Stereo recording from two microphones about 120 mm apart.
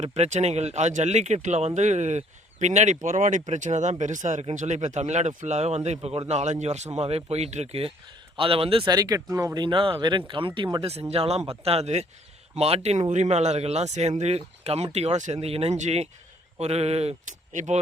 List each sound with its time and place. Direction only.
0.0 s speech: 65° right (ahead or behind); by 8.9 s 50° right (ahead or behind)
8.9 s speech: 30° right (ahead or behind)
11.1 s speech: 60° right (ahead or behind); by 17.7 s 90° right